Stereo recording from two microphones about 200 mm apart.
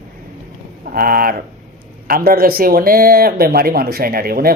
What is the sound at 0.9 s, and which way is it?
A man's voice, 45° right (ahead or behind).